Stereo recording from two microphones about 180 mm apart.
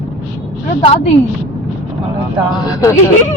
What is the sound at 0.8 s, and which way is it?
Speech, 35° left (ahead or behind).